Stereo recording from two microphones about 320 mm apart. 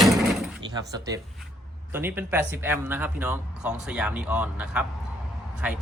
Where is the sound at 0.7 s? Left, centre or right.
Centre.